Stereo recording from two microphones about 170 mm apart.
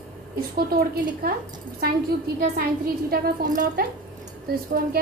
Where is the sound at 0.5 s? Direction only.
60° right (ahead or behind).